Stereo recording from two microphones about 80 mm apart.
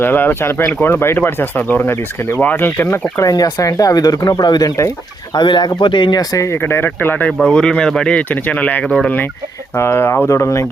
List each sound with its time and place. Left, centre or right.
0.0 s speech: left
3.2 s speech: left
5.3 s speech: left
6.1 s speech: left
6.6 s speech: left
7.3 s speech: centre; by 10.7 s left